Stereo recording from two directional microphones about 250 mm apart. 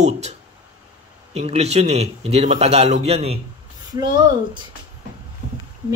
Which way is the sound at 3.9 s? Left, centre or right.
Centre.